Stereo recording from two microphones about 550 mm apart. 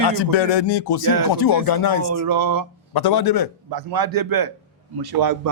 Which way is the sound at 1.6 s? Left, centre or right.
Left.